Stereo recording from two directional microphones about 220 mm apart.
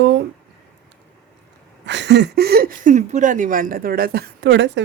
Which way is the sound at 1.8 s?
50° right (ahead or behind).